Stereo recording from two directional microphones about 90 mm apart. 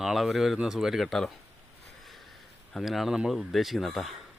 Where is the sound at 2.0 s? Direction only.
Centre (ahead or behind).